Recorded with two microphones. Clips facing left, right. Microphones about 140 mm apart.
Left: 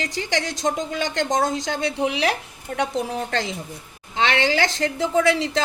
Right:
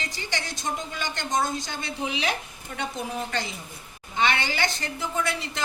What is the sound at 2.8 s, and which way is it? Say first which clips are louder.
A woman's voice: left 6 dB; 85° left.